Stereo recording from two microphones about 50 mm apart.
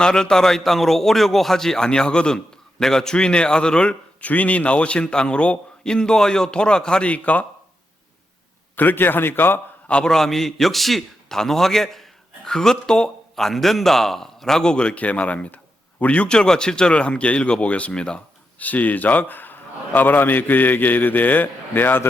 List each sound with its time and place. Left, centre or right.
0.0 s speech: centre
4.2 s a man's voice: left
7.1 s a man's voice: left
8.7 s a man's voice: left
9.9 s speech: centre
13.3 s a man's voice: centre
18.6 s a man's voice: left